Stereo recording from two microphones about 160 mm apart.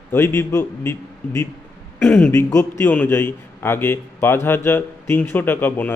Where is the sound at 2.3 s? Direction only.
15° left (ahead or behind).